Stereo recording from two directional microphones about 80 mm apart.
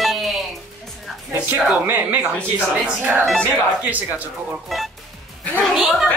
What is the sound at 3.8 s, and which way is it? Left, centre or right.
Speech, centre.